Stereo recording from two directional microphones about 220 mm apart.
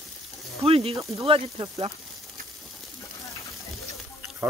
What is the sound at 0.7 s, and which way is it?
Speech, 25° right (ahead or behind).